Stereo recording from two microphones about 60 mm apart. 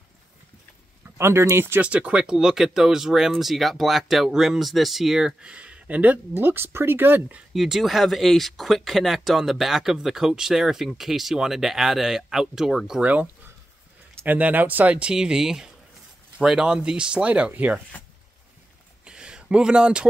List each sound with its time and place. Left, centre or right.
1.1 s speech: right
1.8 s speech: right
6.3 s speech: right
7.5 s speech: centre
13.0 s speech: right
15.0 s speech: centre
19.0 s a sound: centre